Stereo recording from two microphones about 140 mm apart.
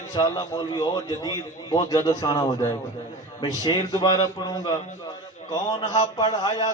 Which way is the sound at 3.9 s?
30° left (ahead or behind).